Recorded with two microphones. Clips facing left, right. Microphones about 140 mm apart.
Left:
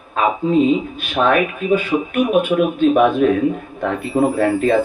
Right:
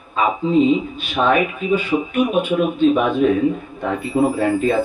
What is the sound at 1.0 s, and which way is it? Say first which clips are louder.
Speech: left 1 dB; 55° left (ahead or behind).